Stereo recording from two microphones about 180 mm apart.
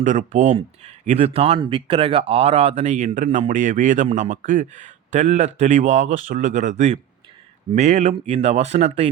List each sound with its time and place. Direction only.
0.0 s speech: 45° right (ahead or behind)